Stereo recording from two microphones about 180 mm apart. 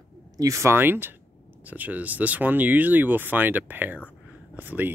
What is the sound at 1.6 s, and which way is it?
Speech, 10° right (ahead or behind).